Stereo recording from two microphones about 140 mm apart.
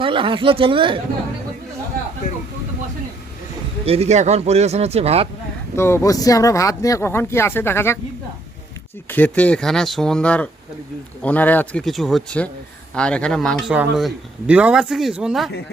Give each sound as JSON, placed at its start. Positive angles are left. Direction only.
{"t": 0.0, "sound": "speech", "side_deg": -40}
{"t": 2.3, "sound": "vehicle", "side_deg": 90}
{"t": 3.8, "sound": "a man's voice", "side_deg": -45}
{"t": 5.7, "sound": "speech", "side_deg": 20}
{"t": 9.0, "sound": "speech", "side_deg": 10}